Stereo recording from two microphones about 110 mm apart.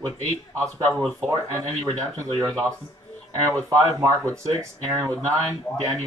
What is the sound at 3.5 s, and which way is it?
Speech, 30° right (ahead or behind).